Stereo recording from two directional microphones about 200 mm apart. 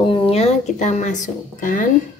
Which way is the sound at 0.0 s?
25° left (ahead or behind).